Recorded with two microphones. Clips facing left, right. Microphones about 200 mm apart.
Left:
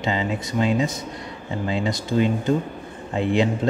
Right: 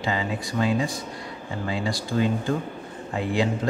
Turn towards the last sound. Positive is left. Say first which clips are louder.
# left 4 dB
turn(degrees=25)  # may be behind; listen again after turning